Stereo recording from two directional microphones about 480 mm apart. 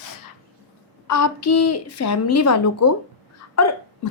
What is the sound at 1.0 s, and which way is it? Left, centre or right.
A woman's voice, left.